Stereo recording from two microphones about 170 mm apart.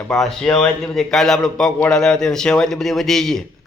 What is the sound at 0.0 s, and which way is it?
A man's voice, centre (ahead or behind).